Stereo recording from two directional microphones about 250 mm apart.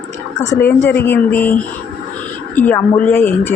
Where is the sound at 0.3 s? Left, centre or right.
Centre.